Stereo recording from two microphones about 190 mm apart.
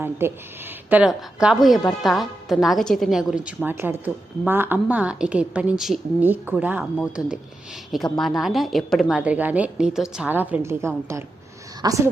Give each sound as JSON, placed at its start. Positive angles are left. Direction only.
{"t": 0.0, "sound": "a woman's voice", "side_deg": -10}